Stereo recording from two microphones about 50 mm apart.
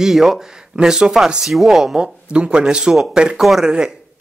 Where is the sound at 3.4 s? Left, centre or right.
Centre.